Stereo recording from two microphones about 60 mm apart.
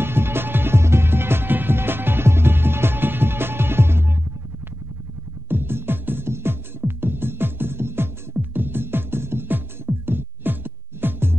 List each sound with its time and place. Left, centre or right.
0.0 s music: right
5.5 s music: right